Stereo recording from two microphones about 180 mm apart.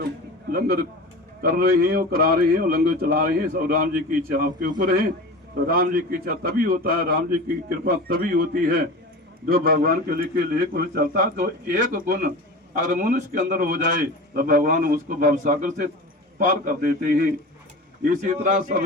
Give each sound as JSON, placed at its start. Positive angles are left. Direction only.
{"t": 0.5, "sound": "a man's voice", "side_deg": -55}